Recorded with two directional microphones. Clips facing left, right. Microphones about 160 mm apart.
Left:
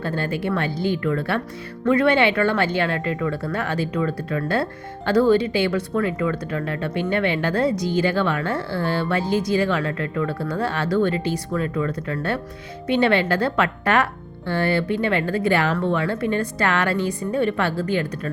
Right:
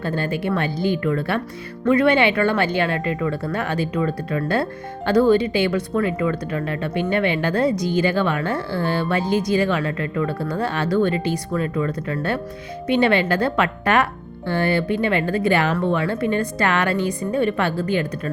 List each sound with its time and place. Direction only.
0.0 s speech: 15° right (ahead or behind)